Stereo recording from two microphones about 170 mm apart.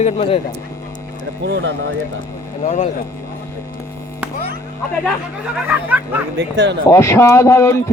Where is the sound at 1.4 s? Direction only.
90° right.